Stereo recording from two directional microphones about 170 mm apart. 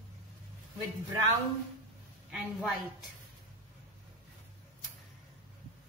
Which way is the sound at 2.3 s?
5° right (ahead or behind).